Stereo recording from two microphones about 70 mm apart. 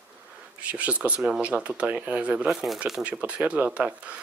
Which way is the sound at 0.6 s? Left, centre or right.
Centre.